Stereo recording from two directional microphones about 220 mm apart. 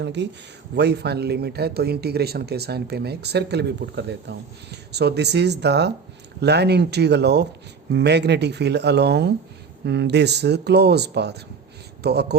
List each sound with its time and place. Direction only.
0.0 s speech: 50° right (ahead or behind)